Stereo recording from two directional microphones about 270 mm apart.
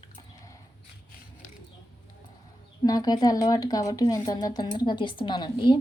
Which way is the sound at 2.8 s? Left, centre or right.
Centre.